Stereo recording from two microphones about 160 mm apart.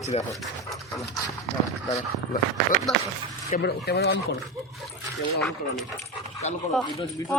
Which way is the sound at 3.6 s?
85° left.